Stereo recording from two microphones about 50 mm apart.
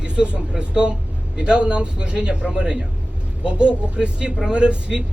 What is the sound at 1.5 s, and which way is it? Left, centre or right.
A man's voice, centre.